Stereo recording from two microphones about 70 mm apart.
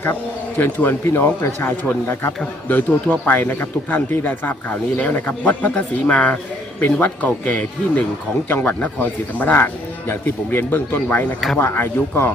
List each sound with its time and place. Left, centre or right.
0.6 s speech: left